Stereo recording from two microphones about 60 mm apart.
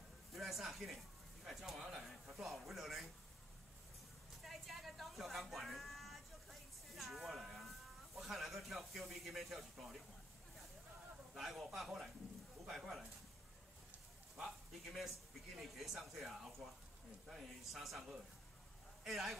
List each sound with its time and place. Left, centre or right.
0.3 s a man's voice: centre
4.5 s a sound: centre
9.1 s speech: centre
11.3 s speech: centre
14.3 s a man's voice: centre